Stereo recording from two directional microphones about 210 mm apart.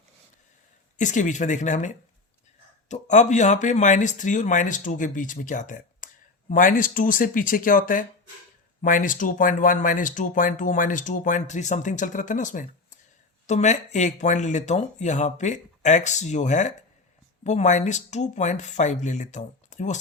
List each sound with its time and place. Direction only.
0.9 s speech: 35° left (ahead or behind)